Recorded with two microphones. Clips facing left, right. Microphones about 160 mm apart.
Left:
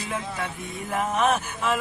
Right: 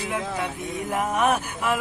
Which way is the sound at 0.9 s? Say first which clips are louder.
Even; 10° right (ahead or behind).